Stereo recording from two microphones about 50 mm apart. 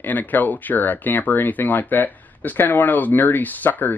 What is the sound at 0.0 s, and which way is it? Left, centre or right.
Speech, left.